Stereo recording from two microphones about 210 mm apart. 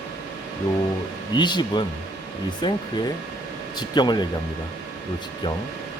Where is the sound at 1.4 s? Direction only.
20° left (ahead or behind).